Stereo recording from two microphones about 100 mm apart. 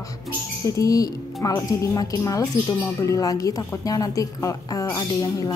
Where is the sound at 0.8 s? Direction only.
35° left (ahead or behind).